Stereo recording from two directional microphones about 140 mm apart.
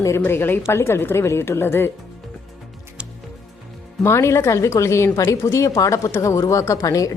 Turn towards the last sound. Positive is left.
turn(degrees=25)  # may be behind; listen again after turning